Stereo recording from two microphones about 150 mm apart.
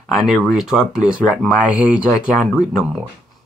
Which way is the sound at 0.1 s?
5° right (ahead or behind).